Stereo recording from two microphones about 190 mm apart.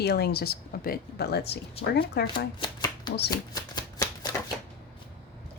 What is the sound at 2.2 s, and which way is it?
Speech, 60° left (ahead or behind).